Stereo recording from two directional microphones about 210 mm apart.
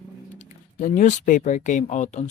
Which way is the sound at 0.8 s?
35° left (ahead or behind).